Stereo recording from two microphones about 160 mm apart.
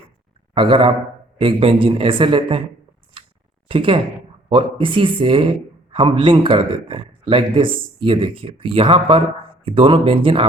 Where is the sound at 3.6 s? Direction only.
35° right (ahead or behind).